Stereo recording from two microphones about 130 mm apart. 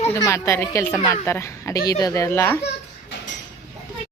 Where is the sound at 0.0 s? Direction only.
20° left (ahead or behind).